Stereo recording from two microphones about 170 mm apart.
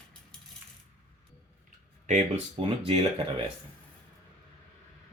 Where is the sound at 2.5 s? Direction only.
35° right (ahead or behind).